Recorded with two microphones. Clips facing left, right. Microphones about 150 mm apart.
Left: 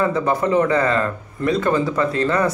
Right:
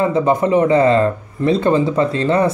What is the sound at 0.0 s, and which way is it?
A man's voice, 20° right (ahead or behind).